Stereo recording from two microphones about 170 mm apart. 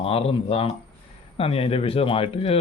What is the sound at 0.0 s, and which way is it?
Speech, 35° left (ahead or behind).